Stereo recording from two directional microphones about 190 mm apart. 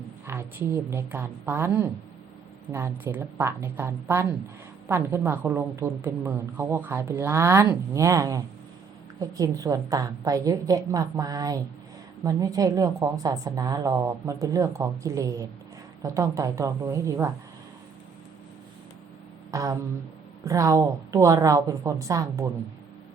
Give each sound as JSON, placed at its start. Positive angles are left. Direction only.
{"t": 0.3, "sound": "a woman's voice", "side_deg": -15}
{"t": 19.5, "sound": "a woman's voice", "side_deg": -15}